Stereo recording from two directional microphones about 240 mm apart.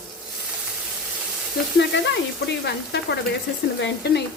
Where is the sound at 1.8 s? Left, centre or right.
Left.